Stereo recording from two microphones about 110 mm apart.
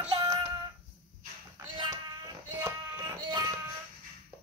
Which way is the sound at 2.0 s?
35° right (ahead or behind).